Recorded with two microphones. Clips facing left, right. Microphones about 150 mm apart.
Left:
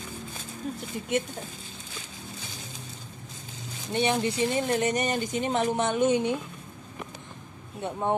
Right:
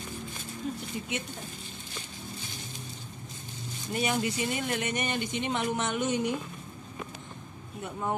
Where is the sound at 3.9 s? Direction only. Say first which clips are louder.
Left 4 dB; 30° left (ahead or behind).